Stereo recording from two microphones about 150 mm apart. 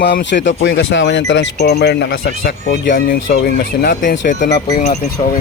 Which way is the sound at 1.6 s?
90° left.